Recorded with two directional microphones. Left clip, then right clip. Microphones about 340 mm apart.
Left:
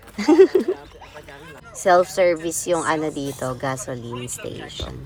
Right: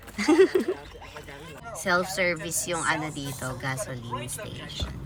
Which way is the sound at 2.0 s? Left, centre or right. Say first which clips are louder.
Left 8 dB; centre.